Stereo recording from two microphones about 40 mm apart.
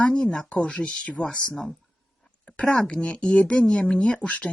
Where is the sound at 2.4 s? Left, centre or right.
Left.